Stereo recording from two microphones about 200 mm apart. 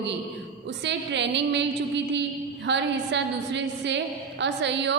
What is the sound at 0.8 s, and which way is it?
Speech, 60° right (ahead or behind).